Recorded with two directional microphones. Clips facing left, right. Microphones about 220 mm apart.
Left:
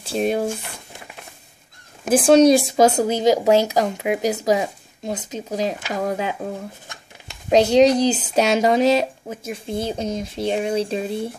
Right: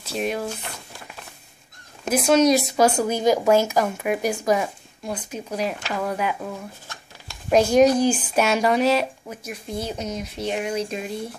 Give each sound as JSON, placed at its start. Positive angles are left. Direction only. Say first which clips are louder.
{"t": 0.0, "sound": "speech", "louder": "left 5 dB", "side_deg": 30}
{"t": 2.0, "sound": "speech", "louder": "left 5 dB", "side_deg": 30}